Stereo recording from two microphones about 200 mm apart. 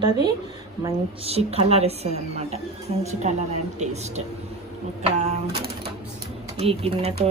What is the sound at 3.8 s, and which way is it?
Speech, 35° right (ahead or behind).